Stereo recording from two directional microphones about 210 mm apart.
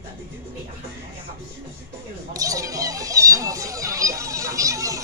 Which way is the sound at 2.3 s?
15° right (ahead or behind).